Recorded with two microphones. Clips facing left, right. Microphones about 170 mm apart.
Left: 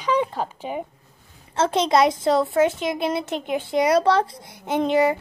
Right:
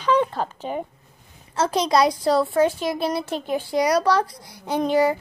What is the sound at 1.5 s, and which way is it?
A woman's voice, 25° left (ahead or behind).